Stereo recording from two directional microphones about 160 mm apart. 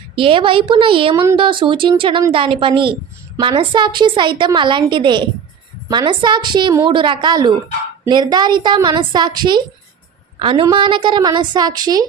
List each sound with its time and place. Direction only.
0.2 s a woman's voice: 30° right (ahead or behind)